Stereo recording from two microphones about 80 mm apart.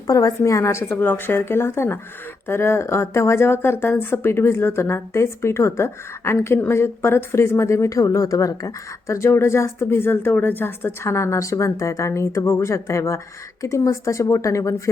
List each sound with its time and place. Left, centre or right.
0.1 s speech: left